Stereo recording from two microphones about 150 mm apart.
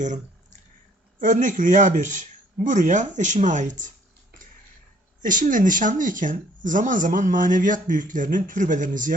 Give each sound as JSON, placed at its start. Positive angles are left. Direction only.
{"t": 1.2, "sound": "speech", "side_deg": -55}
{"t": 5.2, "sound": "speech", "side_deg": -65}